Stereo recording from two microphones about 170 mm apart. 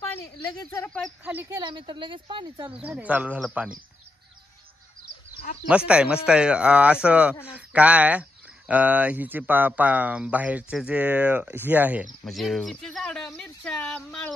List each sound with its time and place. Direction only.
0.8 s speech: 5° left (ahead or behind)
1.2 s speech: 10° right (ahead or behind)
1.6 s a woman's voice: 30° right (ahead or behind)
2.7 s speech: 5° right (ahead or behind)
5.7 s speech: 5° right (ahead or behind)